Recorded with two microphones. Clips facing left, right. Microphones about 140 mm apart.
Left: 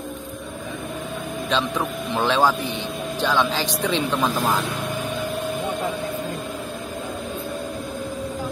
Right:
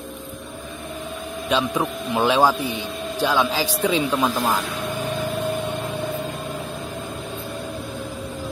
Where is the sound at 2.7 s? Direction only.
Centre (ahead or behind).